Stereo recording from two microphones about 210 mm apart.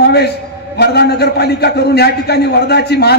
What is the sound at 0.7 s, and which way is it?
Speech, 50° left (ahead or behind).